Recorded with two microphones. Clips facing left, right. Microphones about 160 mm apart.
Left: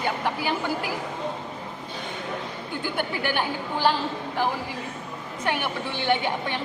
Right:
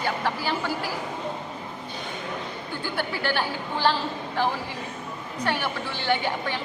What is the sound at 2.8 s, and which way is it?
A woman's voice, 20° left (ahead or behind).